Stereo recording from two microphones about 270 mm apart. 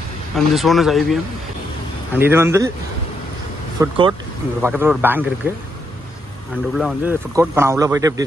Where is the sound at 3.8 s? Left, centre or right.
Centre.